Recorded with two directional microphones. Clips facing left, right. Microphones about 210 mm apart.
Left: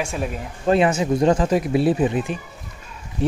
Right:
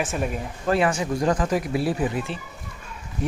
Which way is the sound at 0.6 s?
20° left (ahead or behind).